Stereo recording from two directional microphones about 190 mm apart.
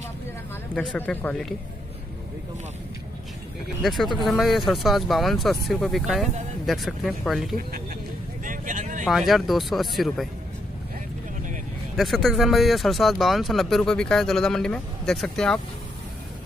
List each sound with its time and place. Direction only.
0.7 s speech: 5° left (ahead or behind)
3.8 s speech: centre (ahead or behind)
8.5 s vehicle: 45° right (ahead or behind)
9.0 s speech: centre (ahead or behind)
12.0 s speech: centre (ahead or behind)